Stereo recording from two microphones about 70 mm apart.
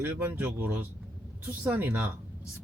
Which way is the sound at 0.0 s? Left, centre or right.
Right.